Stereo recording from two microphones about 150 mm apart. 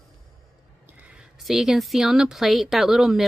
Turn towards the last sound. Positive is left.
turn(degrees=0)  # may be behind; listen again after turning